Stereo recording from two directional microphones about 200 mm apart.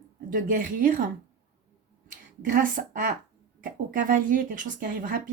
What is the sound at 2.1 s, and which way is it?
A woman's voice, 45° right (ahead or behind).